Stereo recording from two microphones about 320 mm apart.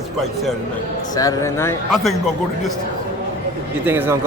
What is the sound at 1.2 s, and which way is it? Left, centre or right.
Speech, centre.